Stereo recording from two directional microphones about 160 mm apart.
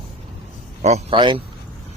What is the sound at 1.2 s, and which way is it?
Speech, 30° right (ahead or behind).